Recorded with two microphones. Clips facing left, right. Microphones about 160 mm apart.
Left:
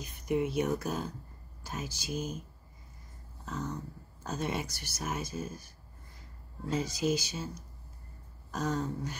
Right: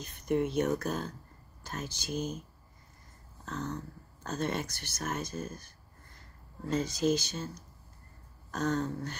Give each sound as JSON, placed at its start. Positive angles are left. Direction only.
{"t": 0.0, "sound": "speech", "side_deg": 10}
{"t": 3.4, "sound": "speech", "side_deg": 10}